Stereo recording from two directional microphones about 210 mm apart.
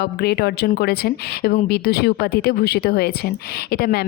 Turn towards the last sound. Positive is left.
turn(degrees=45)  # may be behind; listen again after turning